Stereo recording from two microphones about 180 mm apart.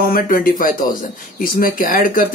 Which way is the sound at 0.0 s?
50° left (ahead or behind).